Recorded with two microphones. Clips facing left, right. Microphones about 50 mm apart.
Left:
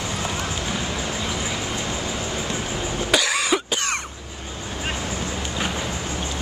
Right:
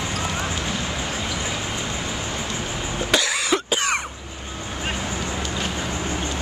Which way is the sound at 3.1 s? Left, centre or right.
Centre.